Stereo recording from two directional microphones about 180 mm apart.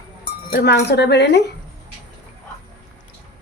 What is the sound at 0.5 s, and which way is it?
Speech, 65° left (ahead or behind).